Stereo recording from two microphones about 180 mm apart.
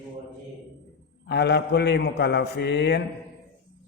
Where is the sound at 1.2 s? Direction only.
70° left (ahead or behind).